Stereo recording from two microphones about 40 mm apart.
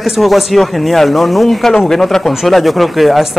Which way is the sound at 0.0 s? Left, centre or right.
Centre.